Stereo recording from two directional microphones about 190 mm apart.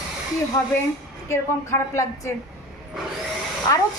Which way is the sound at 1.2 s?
15° left (ahead or behind).